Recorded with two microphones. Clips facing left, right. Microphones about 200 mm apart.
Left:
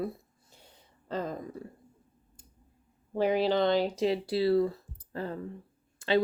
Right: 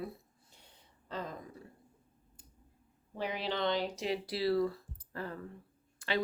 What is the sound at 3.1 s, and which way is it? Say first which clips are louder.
Speech: left 11 dB; 40° left (ahead or behind).